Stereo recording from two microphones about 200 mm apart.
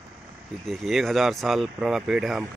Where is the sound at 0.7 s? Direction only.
Centre (ahead or behind).